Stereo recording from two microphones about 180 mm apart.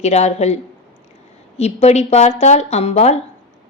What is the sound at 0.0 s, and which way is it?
Speech, 40° left (ahead or behind).